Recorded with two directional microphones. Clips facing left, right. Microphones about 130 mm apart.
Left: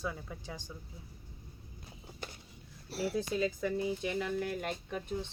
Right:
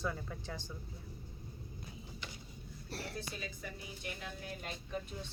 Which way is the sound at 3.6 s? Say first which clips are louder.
Left 13 dB; 90° left.